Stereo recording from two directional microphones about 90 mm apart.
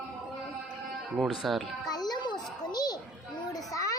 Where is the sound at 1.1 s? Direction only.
Centre (ahead or behind).